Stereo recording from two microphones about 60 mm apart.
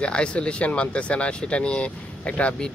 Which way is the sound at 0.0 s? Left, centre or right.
Centre.